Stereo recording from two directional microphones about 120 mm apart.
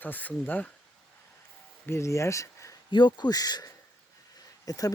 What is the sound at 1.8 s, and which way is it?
Speech, 25° left (ahead or behind).